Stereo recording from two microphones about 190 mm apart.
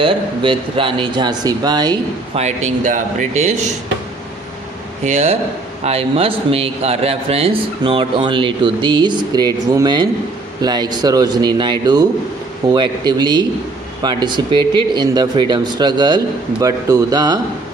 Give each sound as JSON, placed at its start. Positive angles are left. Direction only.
{"t": 0.0, "sound": "a man's voice", "side_deg": -30}
{"t": 2.6, "sound": "speech", "side_deg": -40}
{"t": 5.0, "sound": "a man's voice", "side_deg": -35}